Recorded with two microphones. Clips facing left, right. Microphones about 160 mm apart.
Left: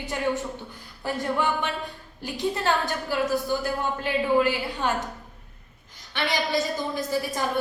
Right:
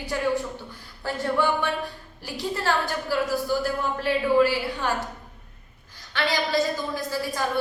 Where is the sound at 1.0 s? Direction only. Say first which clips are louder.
Right 2 dB; 20° left (ahead or behind).